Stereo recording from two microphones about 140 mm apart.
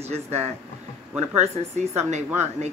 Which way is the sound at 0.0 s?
50° right (ahead or behind).